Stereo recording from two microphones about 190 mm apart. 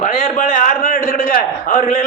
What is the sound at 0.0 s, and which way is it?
A man's voice, 40° left (ahead or behind).